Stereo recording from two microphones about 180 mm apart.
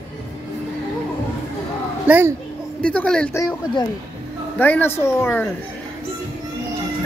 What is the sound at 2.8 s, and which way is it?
Speech, 5° left (ahead or behind).